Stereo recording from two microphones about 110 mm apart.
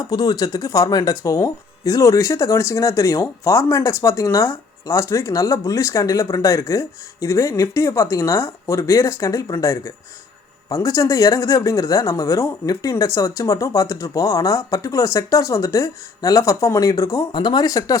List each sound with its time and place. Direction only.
0.1 s speech: 40° left (ahead or behind)